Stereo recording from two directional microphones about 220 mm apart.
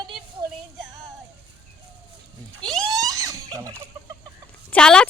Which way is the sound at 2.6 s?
Centre (ahead or behind).